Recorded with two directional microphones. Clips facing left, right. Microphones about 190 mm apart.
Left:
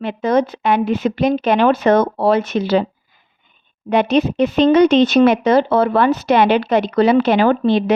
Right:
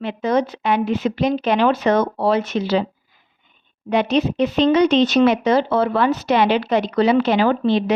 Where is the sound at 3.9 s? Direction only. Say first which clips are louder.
Left 3 dB; 50° left (ahead or behind).